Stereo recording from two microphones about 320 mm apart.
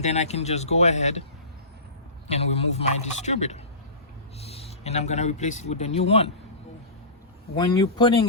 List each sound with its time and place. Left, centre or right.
0.0 s a man's voice: left
2.2 s a man's voice: centre
7.5 s speech: centre